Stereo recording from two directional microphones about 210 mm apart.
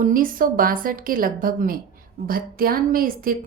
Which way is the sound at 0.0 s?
40° right (ahead or behind).